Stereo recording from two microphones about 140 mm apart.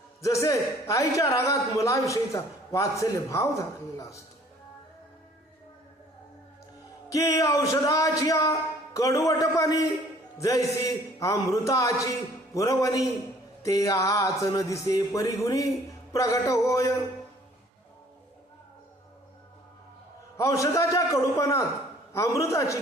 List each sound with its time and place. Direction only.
0.2 s a man's voice: 20° left (ahead or behind)
7.1 s a man's voice: 20° left (ahead or behind)
20.3 s a man's voice: 20° left (ahead or behind)